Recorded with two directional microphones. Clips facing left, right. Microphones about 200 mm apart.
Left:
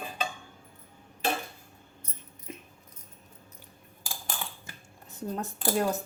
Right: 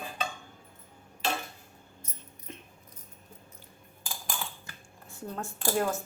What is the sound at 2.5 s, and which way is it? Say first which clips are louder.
Keys jangling: left 3 dB; 5° left (ahead or behind).